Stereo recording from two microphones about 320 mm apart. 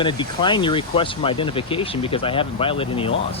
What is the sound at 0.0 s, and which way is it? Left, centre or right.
Speech, centre.